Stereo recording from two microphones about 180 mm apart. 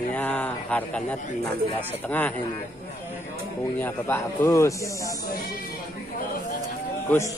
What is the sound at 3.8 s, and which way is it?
A man's voice, 10° left (ahead or behind).